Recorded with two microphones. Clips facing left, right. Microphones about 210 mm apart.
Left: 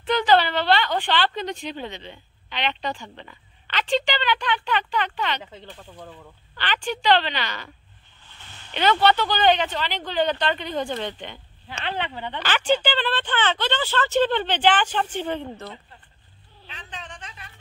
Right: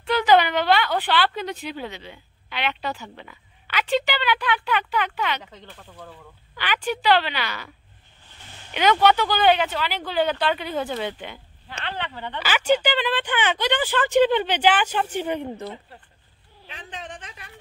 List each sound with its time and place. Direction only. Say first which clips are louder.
0.1 s a woman's voice: right 1 dB; 10° right (ahead or behind)
6.5 s speech: right 2 dB; 10° right (ahead or behind)
8.7 s speech: right 1 dB; 10° right (ahead or behind)
11.8 s speech: left 2 dB; 20° left (ahead or behind)
12.4 s speech: right 1 dB; 10° right (ahead or behind)